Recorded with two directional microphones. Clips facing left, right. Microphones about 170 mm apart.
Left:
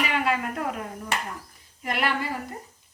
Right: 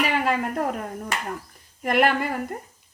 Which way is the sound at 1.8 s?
50° right (ahead or behind).